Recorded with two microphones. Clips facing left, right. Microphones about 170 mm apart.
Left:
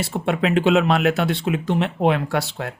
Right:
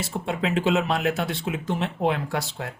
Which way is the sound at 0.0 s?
70° left (ahead or behind).